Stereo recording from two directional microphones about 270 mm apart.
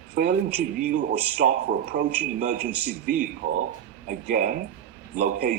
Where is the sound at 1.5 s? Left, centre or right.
Right.